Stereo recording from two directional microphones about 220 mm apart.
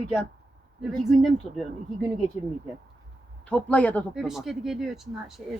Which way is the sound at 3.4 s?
5° left (ahead or behind).